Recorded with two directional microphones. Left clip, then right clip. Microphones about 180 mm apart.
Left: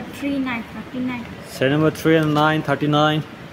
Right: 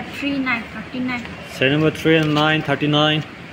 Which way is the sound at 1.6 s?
Centre (ahead or behind).